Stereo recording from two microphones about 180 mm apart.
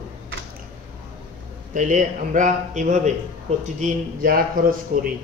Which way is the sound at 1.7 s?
45° right (ahead or behind).